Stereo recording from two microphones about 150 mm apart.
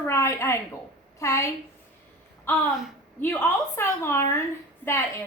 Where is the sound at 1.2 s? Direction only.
20° left (ahead or behind).